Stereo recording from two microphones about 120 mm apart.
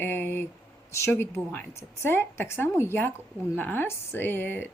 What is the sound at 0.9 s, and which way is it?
A woman's voice, 20° left (ahead or behind).